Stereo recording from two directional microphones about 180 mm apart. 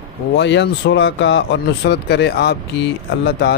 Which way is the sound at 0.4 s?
75° left (ahead or behind).